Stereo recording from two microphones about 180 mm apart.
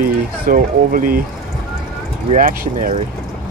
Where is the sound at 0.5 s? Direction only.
50° right (ahead or behind).